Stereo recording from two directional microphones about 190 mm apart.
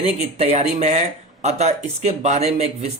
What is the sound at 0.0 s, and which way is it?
Speech, 35° right (ahead or behind).